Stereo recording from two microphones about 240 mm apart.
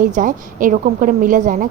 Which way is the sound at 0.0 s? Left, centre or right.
Right.